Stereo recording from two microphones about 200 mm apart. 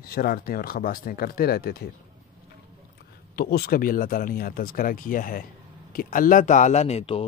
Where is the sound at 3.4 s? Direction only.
50° left (ahead or behind).